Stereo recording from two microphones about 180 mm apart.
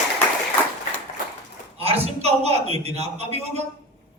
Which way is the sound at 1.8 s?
35° right (ahead or behind).